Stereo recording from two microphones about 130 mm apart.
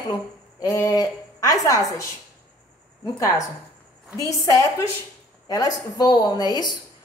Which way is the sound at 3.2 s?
25° left (ahead or behind).